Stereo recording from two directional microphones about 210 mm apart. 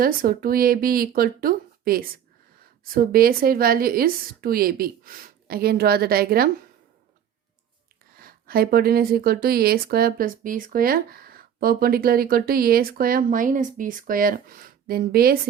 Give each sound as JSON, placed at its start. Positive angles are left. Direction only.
{"t": 0.0, "sound": "speech", "side_deg": -45}
{"t": 8.1, "sound": "speech", "side_deg": -45}